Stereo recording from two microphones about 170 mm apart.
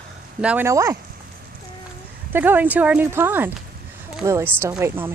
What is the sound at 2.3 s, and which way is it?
A woman's voice, 10° right (ahead or behind).